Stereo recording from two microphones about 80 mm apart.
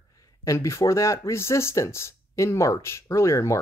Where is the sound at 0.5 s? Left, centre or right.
Left.